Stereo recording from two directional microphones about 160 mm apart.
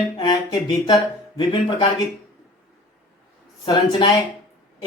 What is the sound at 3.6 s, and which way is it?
Speech, 30° left (ahead or behind).